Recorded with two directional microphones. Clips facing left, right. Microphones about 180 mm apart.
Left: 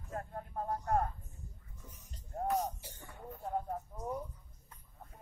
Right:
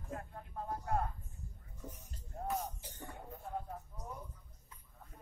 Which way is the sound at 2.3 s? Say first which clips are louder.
Left 6 dB; 45° left (ahead or behind).